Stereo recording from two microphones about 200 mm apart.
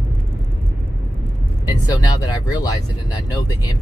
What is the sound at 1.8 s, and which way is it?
Speech, 20° left (ahead or behind).